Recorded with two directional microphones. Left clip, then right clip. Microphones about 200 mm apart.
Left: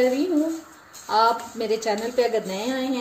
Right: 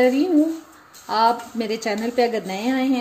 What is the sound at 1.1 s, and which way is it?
Speech, 45° right (ahead or behind).